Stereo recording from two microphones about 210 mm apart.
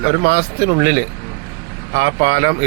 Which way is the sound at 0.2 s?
50° right (ahead or behind).